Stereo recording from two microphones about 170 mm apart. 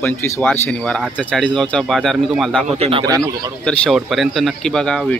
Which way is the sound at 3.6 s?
Centre (ahead or behind).